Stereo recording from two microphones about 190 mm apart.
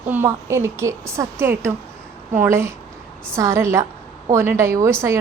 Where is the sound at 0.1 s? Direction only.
10° right (ahead or behind).